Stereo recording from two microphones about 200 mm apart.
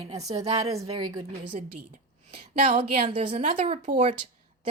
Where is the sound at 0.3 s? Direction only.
30° right (ahead or behind).